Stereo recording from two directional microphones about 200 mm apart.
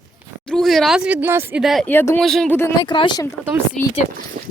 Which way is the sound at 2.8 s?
25° left (ahead or behind).